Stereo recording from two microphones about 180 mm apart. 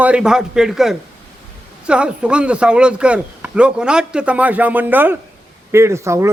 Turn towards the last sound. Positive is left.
turn(degrees=-15)  # may be behind; listen again after turning